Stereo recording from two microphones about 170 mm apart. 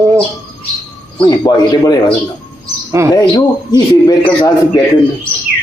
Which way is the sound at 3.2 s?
20° left (ahead or behind).